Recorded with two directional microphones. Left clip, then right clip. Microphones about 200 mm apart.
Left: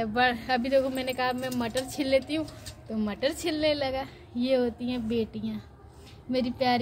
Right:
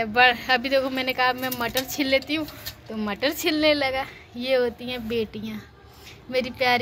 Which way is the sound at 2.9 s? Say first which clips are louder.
Right 3 dB; 20° right (ahead or behind).